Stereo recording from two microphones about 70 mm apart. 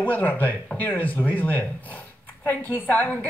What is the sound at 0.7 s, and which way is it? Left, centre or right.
A woman's voice, left.